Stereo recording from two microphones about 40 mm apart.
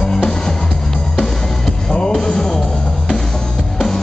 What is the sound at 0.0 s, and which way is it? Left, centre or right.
Music, centre.